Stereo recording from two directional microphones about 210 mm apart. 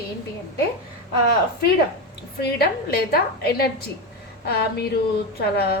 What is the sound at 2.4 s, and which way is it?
A woman's voice, 50° left (ahead or behind).